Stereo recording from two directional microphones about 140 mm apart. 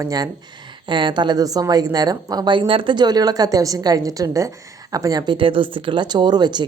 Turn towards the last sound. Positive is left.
turn(degrees=-30)  # may be behind; listen again after turning